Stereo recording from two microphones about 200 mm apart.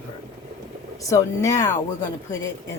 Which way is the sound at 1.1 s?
15° left (ahead or behind).